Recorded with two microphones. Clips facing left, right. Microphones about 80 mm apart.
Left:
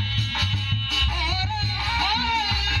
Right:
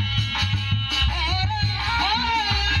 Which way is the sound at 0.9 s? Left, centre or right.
Right.